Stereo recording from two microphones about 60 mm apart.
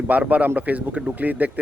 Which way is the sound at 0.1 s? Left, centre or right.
Right.